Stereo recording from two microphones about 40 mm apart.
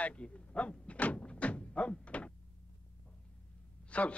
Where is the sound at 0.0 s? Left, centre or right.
Left.